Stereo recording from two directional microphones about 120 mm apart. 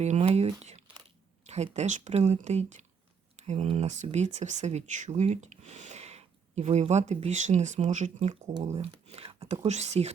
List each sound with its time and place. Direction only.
0.0 s a sound: 65° right (ahead or behind)
0.6 s crumpling: 65° right (ahead or behind)
1.5 s speech: 65° right (ahead or behind)